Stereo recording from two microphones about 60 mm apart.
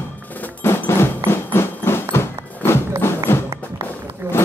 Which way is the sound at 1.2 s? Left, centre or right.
Left.